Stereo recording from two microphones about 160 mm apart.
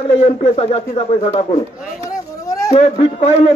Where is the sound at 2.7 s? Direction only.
40° left (ahead or behind).